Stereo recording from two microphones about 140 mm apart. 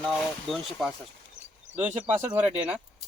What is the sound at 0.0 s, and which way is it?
Speech, centre (ahead or behind).